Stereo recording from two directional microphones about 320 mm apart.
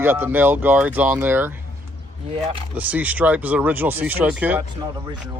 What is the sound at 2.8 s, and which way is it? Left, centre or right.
Speech, centre.